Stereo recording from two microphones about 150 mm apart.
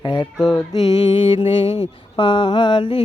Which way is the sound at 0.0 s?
30° left (ahead or behind).